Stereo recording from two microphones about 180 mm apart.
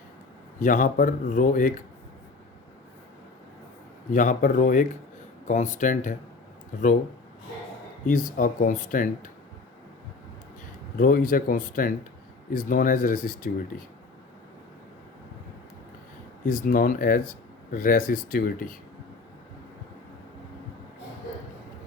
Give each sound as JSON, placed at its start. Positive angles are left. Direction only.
{"t": 0.6, "sound": "speech", "side_deg": 45}
{"t": 4.1, "sound": "speech", "side_deg": 45}
{"t": 8.0, "sound": "speech", "side_deg": 45}
{"t": 10.9, "sound": "speech", "side_deg": 50}
{"t": 16.5, "sound": "speech", "side_deg": 50}